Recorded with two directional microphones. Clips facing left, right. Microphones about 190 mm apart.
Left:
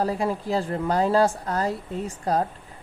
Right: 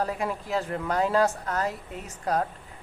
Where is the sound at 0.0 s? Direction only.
35° left (ahead or behind).